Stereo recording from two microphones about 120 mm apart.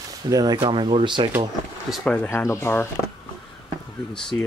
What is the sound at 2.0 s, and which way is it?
Speech, 15° left (ahead or behind).